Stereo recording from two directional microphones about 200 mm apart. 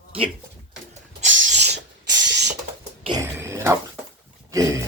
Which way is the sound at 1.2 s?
65° right (ahead or behind).